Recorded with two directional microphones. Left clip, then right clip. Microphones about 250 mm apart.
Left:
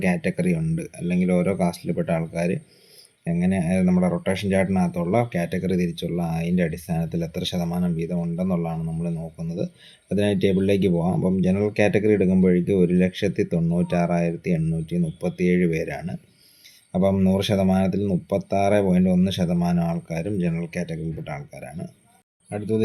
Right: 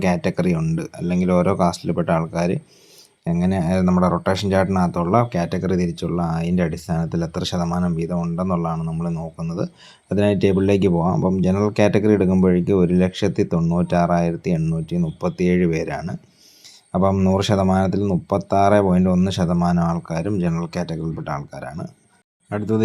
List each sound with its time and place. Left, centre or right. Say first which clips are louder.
0.0 s speech: right 4 dB; right